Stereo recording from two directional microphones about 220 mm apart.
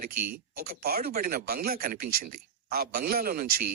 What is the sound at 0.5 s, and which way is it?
Speech, 45° right (ahead or behind).